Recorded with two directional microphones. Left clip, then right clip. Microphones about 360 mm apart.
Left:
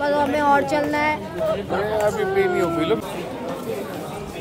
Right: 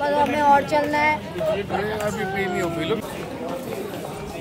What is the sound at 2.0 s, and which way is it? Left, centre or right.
Speech, left.